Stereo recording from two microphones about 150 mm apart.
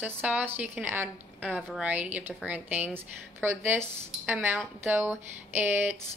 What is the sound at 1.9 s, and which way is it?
A woman's voice, 10° right (ahead or behind).